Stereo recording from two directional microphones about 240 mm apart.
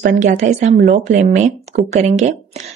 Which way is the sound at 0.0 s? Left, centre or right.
Right.